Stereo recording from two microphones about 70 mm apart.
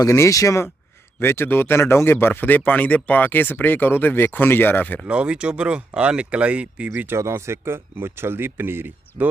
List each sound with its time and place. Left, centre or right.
0.0 s speech: left
1.2 s speech: left
5.0 s speech: centre
7.1 s speech: right